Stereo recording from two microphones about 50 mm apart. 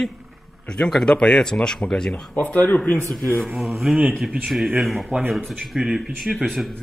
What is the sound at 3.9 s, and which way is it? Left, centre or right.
Speech, centre.